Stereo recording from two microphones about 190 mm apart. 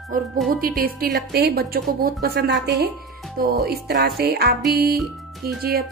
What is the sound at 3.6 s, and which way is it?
Speech, 55° right (ahead or behind).